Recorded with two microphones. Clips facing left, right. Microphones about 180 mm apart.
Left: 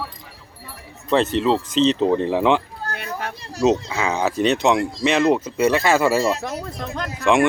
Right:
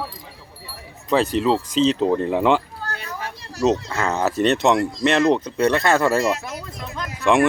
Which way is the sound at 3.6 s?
Centre (ahead or behind).